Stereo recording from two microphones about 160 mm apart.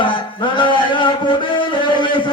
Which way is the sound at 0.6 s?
30° left (ahead or behind).